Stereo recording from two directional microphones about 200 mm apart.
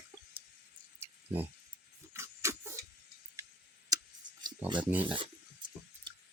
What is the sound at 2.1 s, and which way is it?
Pig, 15° right (ahead or behind).